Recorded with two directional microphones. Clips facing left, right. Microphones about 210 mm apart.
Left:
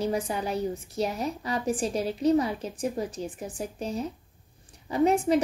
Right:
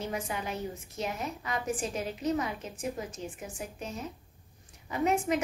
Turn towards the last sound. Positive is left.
turn(degrees=35)  # may be behind; listen again after turning